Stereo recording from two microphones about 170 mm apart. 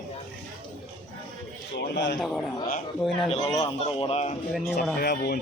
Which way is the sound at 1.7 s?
90° left.